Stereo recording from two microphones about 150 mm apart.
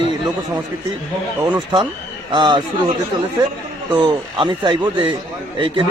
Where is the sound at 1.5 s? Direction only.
30° right (ahead or behind).